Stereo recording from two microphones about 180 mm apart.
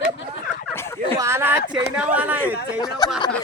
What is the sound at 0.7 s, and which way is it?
Fowl, 15° left (ahead or behind).